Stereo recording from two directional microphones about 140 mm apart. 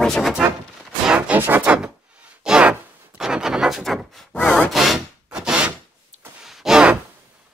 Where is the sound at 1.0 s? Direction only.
5° right (ahead or behind).